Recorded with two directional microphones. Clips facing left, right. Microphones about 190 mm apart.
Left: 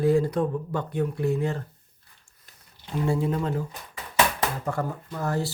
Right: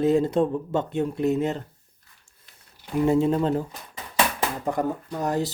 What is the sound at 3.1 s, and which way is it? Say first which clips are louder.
Speech: right 5 dB; 25° right (ahead or behind).